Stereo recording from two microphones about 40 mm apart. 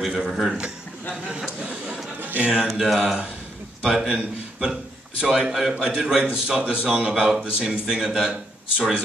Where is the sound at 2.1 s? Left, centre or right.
Right.